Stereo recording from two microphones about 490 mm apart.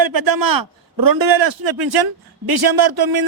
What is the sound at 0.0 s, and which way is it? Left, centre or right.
A man's voice, right.